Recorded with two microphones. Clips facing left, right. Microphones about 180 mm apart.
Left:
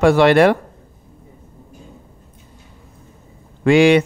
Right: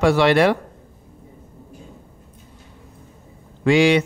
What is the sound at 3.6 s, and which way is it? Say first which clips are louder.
Speech: left 4 dB; 55° left (ahead or behind).